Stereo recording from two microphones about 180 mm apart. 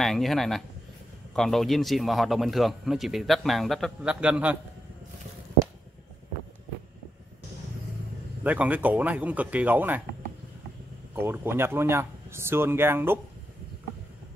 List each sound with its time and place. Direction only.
0.0 s a man's voice: centre (ahead or behind)
8.5 s speech: 10° right (ahead or behind)
11.1 s speech: 10° right (ahead or behind)